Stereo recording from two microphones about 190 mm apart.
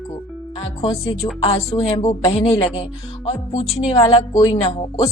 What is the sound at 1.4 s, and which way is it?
A woman's voice, 30° left (ahead or behind).